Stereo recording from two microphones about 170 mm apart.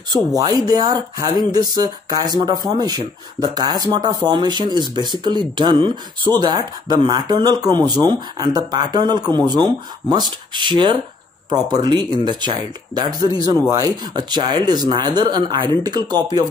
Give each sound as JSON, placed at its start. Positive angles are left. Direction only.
{"t": 0.4, "sound": "speech", "side_deg": -20}